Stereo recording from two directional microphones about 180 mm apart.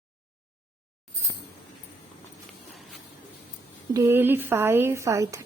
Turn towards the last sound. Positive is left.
turn(degrees=-15)  # may be behind; listen again after turning